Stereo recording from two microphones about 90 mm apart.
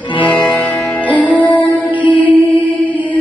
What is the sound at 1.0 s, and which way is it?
Music, 15° right (ahead or behind).